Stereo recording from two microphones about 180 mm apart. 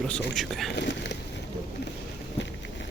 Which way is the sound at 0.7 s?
75° left (ahead or behind).